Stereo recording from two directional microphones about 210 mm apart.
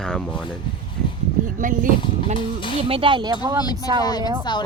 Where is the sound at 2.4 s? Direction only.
25° left (ahead or behind).